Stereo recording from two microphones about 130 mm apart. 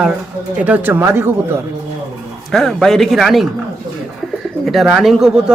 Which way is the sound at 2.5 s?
5° left (ahead or behind).